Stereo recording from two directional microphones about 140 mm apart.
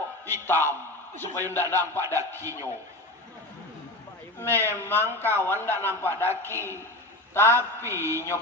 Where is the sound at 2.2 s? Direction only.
20° right (ahead or behind).